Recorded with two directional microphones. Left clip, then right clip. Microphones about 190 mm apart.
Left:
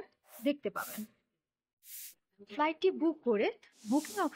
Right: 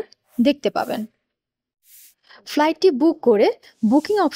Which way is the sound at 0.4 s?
50° right (ahead or behind).